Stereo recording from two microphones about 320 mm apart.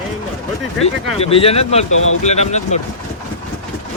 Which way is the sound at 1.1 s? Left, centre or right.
Centre.